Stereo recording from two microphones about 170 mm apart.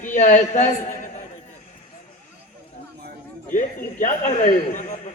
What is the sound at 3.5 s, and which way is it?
A man's voice, 50° left (ahead or behind).